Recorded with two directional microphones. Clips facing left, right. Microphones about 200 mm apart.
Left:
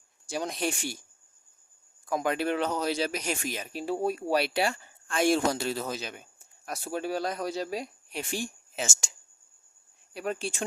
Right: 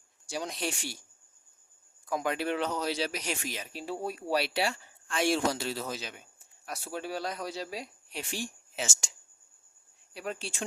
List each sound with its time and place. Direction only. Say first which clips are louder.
0.3 s speech: left 4 dB; 50° left (ahead or behind)
2.0 s speech: left 3 dB; 50° left (ahead or behind)
10.2 s speech: left 5 dB; 50° left (ahead or behind)